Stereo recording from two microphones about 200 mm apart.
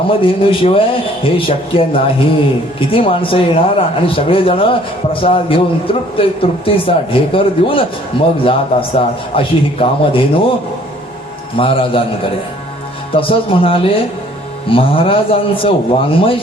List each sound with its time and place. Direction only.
0.1 s a man's voice: 25° left (ahead or behind)
11.5 s a man's voice: 25° left (ahead or behind)
13.1 s a man's voice: 25° left (ahead or behind)